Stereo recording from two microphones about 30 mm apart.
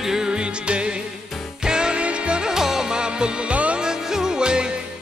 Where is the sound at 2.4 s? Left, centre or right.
Centre.